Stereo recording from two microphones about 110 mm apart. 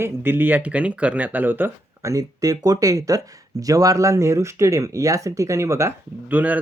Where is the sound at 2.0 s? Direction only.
30° right (ahead or behind).